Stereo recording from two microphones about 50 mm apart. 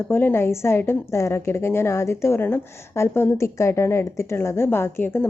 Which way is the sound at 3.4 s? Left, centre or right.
Left.